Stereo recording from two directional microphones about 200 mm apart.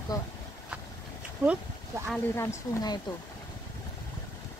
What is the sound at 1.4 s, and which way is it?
Speech, 5° right (ahead or behind).